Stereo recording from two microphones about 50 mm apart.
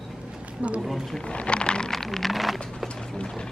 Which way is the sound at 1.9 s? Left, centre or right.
Centre.